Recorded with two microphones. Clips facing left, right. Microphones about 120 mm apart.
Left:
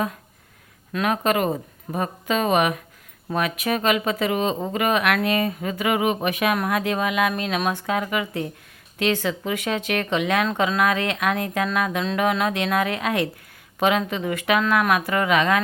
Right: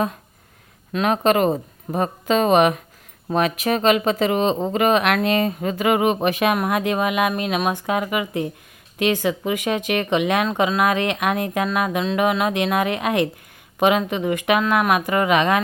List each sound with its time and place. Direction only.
0.9 s speech: 25° right (ahead or behind)